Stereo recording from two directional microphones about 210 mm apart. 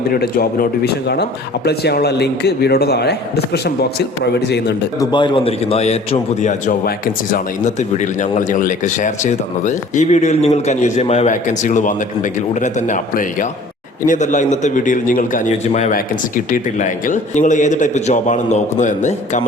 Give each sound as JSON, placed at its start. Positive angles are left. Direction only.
{"t": 0.1, "sound": "speech", "side_deg": 45}
{"t": 4.9, "sound": "a man's voice", "side_deg": 20}